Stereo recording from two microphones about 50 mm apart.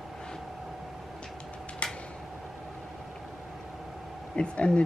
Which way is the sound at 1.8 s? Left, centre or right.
Centre.